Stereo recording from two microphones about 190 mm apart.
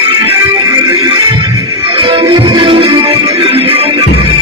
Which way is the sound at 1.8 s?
30° right (ahead or behind).